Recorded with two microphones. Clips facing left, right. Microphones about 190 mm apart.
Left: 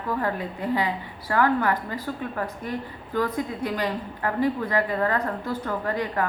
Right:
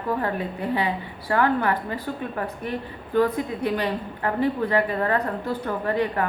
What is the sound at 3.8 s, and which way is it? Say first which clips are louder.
A woman's voice: right 1 dB; 25° right (ahead or behind).